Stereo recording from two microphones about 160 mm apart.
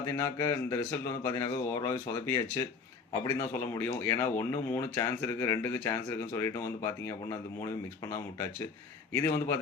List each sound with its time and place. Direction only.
0.1 s speech: 15° left (ahead or behind)